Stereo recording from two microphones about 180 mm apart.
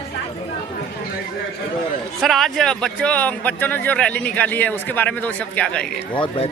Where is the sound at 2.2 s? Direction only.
Centre (ahead or behind).